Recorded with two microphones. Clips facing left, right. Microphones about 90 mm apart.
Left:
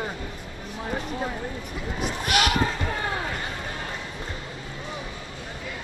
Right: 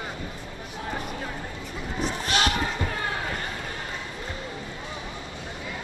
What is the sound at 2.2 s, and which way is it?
Basketball bounce, 30° right (ahead or behind).